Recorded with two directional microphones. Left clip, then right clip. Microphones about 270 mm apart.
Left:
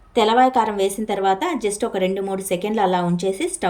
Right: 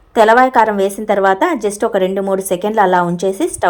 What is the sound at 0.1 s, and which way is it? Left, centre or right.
Speech, right.